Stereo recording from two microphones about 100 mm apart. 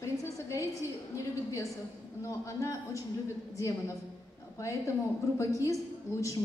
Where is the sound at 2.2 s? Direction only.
30° left (ahead or behind).